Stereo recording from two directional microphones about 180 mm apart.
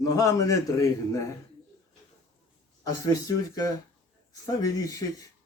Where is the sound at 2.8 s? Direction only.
20° left (ahead or behind).